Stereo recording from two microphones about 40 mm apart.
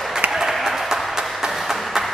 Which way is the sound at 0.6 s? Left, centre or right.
Centre.